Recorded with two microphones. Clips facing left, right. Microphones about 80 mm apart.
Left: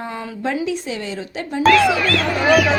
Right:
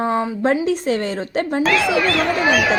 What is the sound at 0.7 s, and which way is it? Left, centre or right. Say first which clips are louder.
Speech: right 5 dB; right.